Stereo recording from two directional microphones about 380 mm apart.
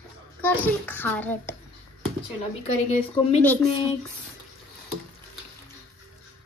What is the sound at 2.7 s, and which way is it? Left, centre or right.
Speech, centre.